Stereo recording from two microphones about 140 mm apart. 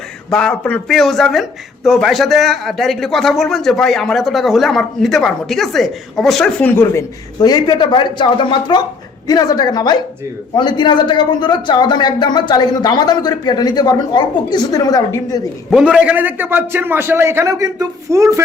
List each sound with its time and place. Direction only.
0.3 s speech: 5° left (ahead or behind)
6.7 s speech: 15° left (ahead or behind)
7.3 s a man's voice: 30° left (ahead or behind)
15.7 s a man's voice: 10° right (ahead or behind)